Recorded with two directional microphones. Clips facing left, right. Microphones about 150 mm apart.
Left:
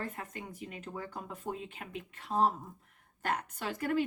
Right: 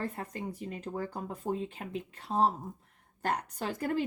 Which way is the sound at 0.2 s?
35° right (ahead or behind).